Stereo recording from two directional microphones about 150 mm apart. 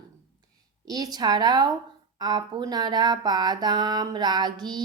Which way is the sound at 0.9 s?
25° right (ahead or behind).